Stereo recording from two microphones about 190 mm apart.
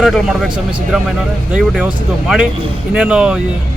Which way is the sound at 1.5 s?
5° right (ahead or behind).